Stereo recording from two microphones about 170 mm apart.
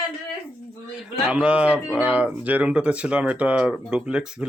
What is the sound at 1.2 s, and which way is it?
Speech, 5° right (ahead or behind).